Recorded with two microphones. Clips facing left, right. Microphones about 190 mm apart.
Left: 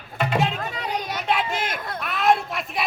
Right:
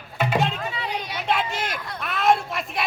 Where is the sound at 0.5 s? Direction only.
45° left (ahead or behind).